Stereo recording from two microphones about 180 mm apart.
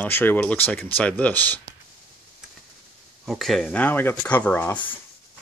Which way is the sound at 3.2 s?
Centre (ahead or behind).